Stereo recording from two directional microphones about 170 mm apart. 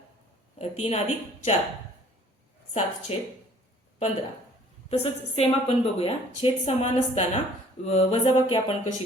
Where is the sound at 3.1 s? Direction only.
35° left (ahead or behind).